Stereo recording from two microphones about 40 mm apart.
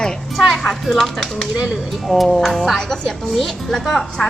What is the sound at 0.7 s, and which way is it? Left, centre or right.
A woman's voice, centre.